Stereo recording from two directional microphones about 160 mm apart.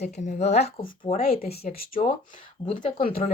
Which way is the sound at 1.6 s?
65° left (ahead or behind).